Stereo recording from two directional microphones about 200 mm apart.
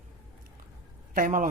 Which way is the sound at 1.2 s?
40° right (ahead or behind).